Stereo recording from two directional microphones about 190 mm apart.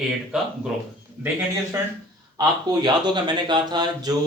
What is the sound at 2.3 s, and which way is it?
Speech, 20° right (ahead or behind).